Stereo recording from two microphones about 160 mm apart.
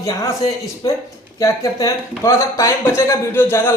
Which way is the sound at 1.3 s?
20° left (ahead or behind).